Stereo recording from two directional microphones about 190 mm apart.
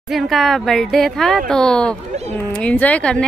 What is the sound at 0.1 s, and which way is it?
Speech, centre (ahead or behind).